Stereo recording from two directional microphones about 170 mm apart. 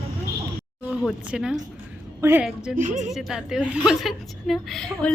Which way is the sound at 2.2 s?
15° right (ahead or behind).